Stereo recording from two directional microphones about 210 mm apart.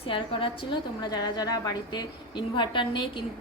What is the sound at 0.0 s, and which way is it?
A woman's voice, 25° left (ahead or behind).